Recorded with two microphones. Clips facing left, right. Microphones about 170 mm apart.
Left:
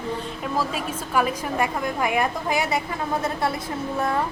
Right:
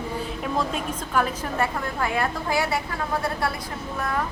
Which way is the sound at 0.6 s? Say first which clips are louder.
Left 1 dB; 5° left (ahead or behind).